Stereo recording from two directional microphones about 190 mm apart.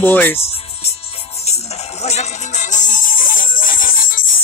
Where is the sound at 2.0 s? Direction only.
35° left (ahead or behind).